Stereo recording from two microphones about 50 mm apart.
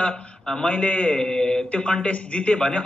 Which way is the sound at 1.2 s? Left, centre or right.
Centre.